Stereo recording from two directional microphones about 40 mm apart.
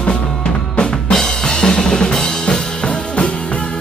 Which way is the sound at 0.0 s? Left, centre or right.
Left.